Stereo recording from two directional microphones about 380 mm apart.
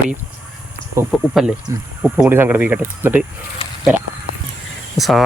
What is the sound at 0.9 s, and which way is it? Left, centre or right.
Speech, centre.